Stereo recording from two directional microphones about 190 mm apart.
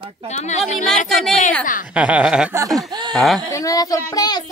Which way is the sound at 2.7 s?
20° right (ahead or behind).